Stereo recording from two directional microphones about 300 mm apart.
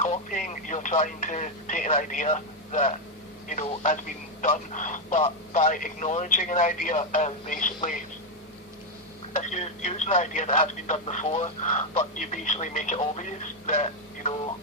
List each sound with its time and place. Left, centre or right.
0.0 s speech: left
9.3 s speech: left